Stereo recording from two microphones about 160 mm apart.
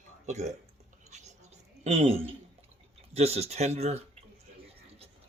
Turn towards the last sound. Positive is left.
turn(degrees=-40)  # may be behind; listen again after turning